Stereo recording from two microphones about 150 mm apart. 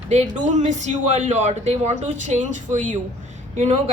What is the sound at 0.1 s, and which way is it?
A woman's voice, 45° right (ahead or behind).